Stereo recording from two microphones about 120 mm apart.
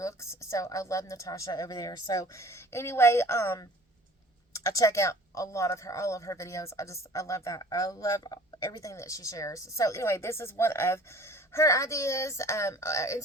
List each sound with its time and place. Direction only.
0.0 s speech: 25° left (ahead or behind)